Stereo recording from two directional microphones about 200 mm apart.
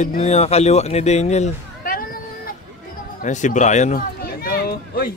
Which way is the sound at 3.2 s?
40° left (ahead or behind).